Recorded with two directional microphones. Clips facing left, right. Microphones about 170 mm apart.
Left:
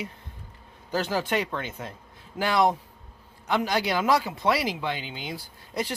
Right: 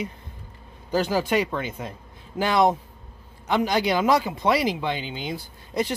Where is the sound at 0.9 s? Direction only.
15° right (ahead or behind).